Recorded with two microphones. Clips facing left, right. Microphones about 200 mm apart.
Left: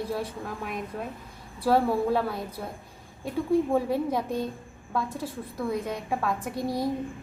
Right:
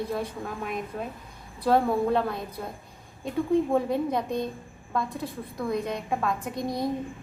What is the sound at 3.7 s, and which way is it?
A woman's voice, 10° left (ahead or behind).